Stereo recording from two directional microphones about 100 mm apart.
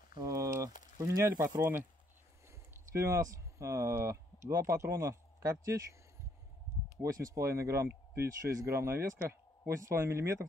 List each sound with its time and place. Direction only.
0.2 s a sound: 35° right (ahead or behind)
0.5 s speech: 35° right (ahead or behind)
2.9 s speech: 30° right (ahead or behind)
7.0 s speech: 35° right (ahead or behind)